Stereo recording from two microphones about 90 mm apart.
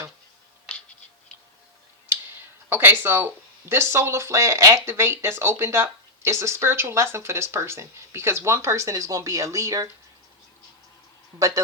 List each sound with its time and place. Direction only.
2.1 s tick: 25° right (ahead or behind)
2.6 s speech: 25° right (ahead or behind)
11.3 s speech: 40° right (ahead or behind)